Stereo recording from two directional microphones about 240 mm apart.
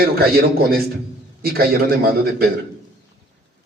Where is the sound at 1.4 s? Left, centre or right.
Right.